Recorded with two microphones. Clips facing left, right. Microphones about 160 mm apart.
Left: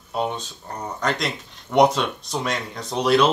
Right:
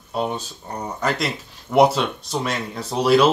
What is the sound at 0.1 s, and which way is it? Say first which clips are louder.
Speech: right 1 dB; centre (ahead or behind).